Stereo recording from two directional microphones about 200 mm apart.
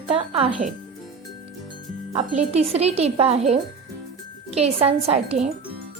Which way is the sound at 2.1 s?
35° right (ahead or behind).